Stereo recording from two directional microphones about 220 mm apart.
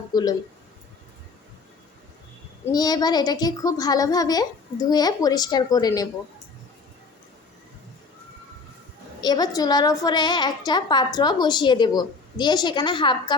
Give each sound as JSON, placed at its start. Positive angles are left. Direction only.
{"t": 0.1, "sound": "speech", "side_deg": 15}
{"t": 2.7, "sound": "a woman's voice", "side_deg": 20}
{"t": 9.2, "sound": "a woman's voice", "side_deg": 20}